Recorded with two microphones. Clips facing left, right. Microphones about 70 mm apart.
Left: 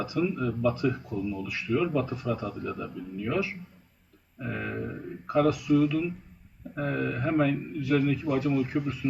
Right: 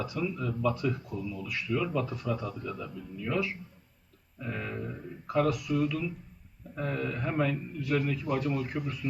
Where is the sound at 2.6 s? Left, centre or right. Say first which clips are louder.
Left 4 dB; left.